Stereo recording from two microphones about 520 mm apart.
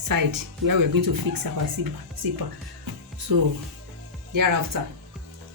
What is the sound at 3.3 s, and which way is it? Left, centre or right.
Speech, right.